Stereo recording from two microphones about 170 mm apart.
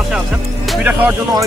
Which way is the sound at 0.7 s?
5° right (ahead or behind).